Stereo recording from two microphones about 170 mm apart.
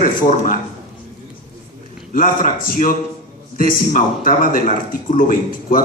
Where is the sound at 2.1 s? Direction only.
55° left (ahead or behind).